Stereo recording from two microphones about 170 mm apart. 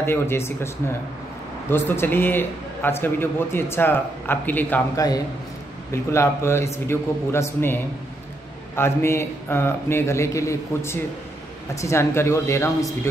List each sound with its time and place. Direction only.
0.0 s a man's voice: 15° left (ahead or behind)
1.7 s a man's voice: 15° left (ahead or behind)
6.1 s a man's voice: 15° left (ahead or behind)